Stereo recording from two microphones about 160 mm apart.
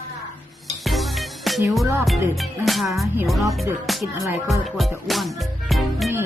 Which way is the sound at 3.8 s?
Centre (ahead or behind).